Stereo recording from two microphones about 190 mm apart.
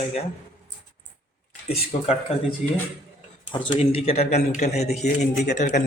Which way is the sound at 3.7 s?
30° left (ahead or behind).